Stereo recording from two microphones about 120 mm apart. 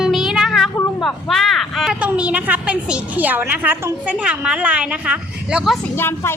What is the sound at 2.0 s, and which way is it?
A woman's voice, 10° right (ahead or behind).